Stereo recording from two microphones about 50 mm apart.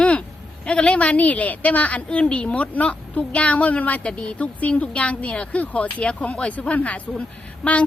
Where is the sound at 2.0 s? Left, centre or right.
Centre.